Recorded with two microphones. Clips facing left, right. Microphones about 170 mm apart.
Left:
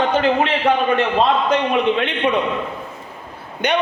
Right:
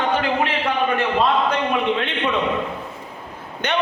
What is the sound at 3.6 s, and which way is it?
Speech, 15° left (ahead or behind).